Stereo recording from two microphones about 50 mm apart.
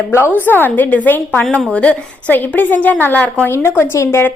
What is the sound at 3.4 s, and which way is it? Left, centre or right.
Speech, left.